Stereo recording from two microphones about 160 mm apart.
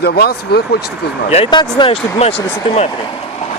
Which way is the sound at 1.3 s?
30° left (ahead or behind).